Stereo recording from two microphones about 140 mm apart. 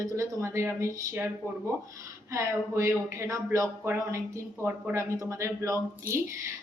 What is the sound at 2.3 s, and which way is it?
Speech, 20° right (ahead or behind).